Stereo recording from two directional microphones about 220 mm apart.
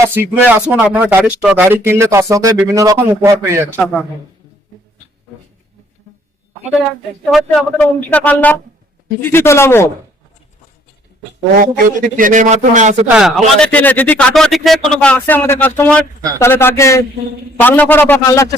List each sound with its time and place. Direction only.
0.0 s speech: 10° right (ahead or behind)
7.3 s speech: centre (ahead or behind)
11.5 s a man's voice: 40° right (ahead or behind)
13.1 s speech: centre (ahead or behind)